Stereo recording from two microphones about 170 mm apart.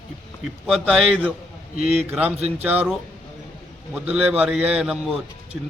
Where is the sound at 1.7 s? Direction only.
40° right (ahead or behind).